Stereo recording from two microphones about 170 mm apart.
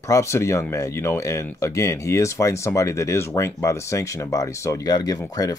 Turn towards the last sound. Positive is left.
turn(degrees=20)  # may be behind; listen again after turning